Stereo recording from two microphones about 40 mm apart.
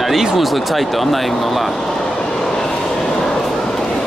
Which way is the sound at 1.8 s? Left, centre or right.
Centre.